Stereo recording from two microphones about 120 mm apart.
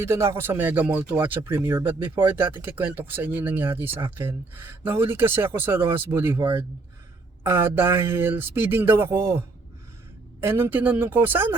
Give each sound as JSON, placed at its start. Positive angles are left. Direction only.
{"t": 0.0, "sound": "speech", "side_deg": -20}
{"t": 7.4, "sound": "speech", "side_deg": -20}
{"t": 10.4, "sound": "speech", "side_deg": -15}